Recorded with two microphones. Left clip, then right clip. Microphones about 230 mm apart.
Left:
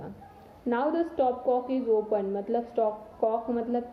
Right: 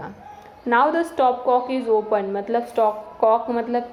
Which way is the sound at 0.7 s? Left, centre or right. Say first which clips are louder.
Right 9 dB; centre.